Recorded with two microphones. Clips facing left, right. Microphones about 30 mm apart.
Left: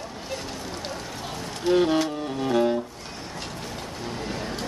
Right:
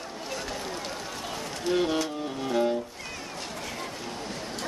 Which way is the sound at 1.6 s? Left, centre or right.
Centre.